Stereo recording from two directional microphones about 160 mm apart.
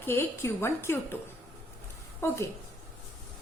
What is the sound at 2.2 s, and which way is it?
Speech, 15° left (ahead or behind).